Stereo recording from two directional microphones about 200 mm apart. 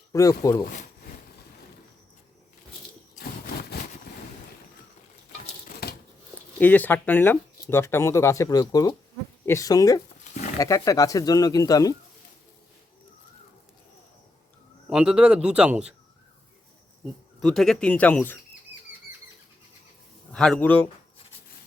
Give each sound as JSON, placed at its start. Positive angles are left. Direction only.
{"t": 0.1, "sound": "speech", "side_deg": 15}
{"t": 3.2, "sound": "a sound", "side_deg": 50}
{"t": 5.8, "sound": "crumpling", "side_deg": 55}
{"t": 6.6, "sound": "speech", "side_deg": 10}
{"t": 14.8, "sound": "speech", "side_deg": -5}
{"t": 17.4, "sound": "speech", "side_deg": 0}
{"t": 20.3, "sound": "speech", "side_deg": 5}